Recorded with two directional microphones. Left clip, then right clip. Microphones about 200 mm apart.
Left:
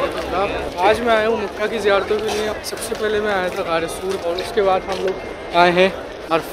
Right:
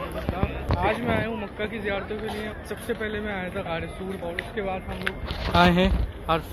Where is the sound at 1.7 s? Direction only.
20° left (ahead or behind).